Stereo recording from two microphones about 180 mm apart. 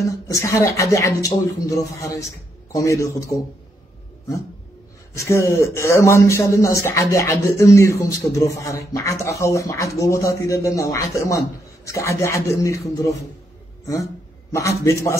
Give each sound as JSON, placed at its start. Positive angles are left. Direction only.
{"t": 0.1, "sound": "speech", "side_deg": 15}
{"t": 5.1, "sound": "speech", "side_deg": 15}
{"t": 14.6, "sound": "speech", "side_deg": 15}